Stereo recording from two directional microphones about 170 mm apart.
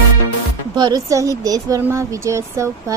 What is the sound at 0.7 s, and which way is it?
Speech, 25° right (ahead or behind).